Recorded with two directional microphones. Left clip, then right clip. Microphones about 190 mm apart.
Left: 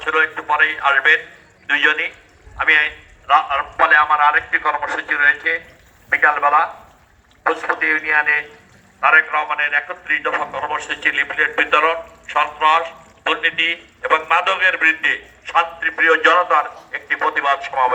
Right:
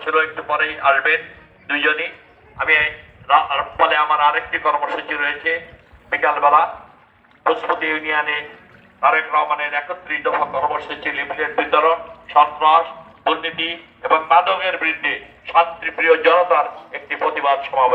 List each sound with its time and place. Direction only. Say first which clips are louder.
0.0 s a man's voice: left 1 dB; 10° left (ahead or behind)
3.2 s a man's voice: even; centre (ahead or behind)
4.3 s a man's voice: left 1 dB; 15° right (ahead or behind)